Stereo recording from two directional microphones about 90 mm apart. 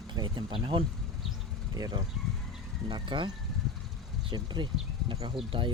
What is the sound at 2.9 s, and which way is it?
Speech, 60° right (ahead or behind).